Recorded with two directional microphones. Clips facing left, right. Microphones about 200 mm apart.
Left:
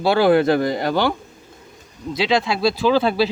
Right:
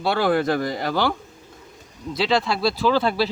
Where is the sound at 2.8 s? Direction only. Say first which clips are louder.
Left 3 dB; 25° left (ahead or behind).